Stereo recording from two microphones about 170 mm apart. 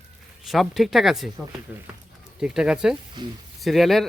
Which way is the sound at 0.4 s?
Centre (ahead or behind).